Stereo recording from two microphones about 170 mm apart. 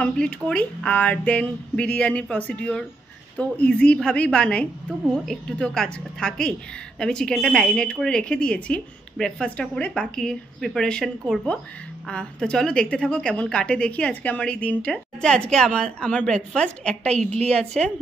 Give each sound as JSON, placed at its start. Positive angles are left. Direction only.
{"t": 0.0, "sound": "a woman's voice", "side_deg": 5}
{"t": 17.0, "sound": "a woman's voice", "side_deg": -40}
{"t": 17.6, "sound": "speech", "side_deg": 5}